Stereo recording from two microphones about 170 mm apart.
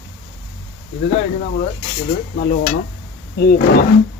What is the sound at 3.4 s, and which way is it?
Speech, 70° left (ahead or behind).